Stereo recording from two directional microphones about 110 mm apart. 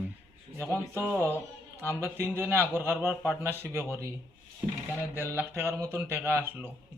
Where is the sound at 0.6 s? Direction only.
20° right (ahead or behind).